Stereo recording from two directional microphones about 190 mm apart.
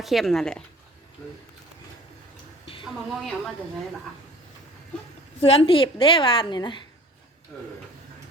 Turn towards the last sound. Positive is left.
turn(degrees=25)  # may be behind; listen again after turning